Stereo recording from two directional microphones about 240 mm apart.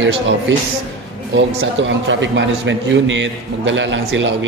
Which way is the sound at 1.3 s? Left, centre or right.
Right.